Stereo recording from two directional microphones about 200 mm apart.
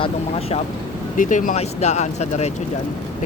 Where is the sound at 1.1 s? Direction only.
40° left (ahead or behind).